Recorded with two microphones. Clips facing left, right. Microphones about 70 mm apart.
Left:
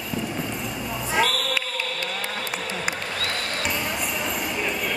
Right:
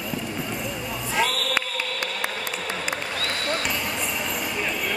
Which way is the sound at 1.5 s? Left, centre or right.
Right.